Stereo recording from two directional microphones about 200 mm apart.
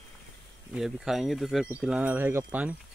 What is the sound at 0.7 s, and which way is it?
Speech, centre (ahead or behind).